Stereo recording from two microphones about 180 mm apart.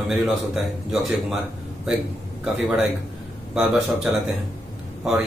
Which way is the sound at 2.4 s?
5° right (ahead or behind).